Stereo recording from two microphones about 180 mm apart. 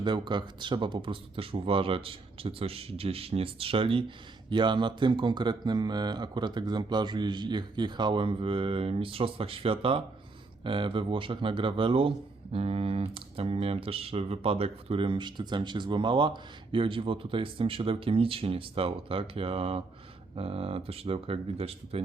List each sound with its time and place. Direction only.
0.0 s speech: 25° right (ahead or behind)